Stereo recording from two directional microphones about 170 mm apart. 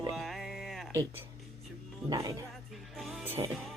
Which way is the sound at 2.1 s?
20° right (ahead or behind).